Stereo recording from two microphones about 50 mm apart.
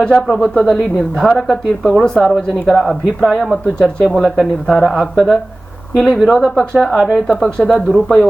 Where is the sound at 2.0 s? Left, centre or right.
Centre.